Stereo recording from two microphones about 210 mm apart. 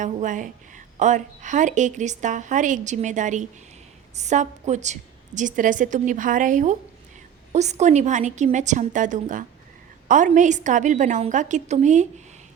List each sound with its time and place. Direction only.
0.0 s a woman's voice: 35° right (ahead or behind)